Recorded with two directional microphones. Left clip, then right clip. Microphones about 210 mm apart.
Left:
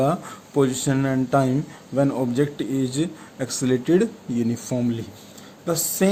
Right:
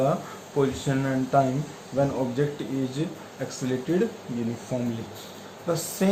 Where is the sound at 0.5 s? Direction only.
55° left (ahead or behind).